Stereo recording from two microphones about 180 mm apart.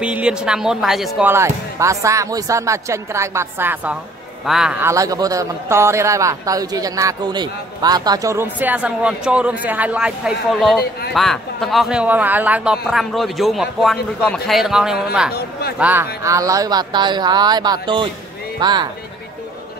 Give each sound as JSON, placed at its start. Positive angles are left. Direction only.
{"t": 0.0, "sound": "a man's voice", "side_deg": -5}
{"t": 1.3, "sound": "a man's voice", "side_deg": -15}
{"t": 10.8, "sound": "speech", "side_deg": 60}
{"t": 11.1, "sound": "a man's voice", "side_deg": 0}